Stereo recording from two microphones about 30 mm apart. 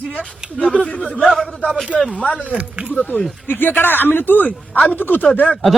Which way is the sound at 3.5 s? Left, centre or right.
Left.